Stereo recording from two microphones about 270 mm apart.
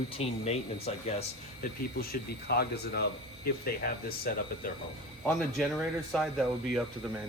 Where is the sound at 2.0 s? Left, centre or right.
Left.